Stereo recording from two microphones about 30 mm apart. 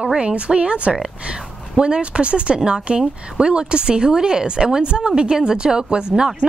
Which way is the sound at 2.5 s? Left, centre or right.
Right.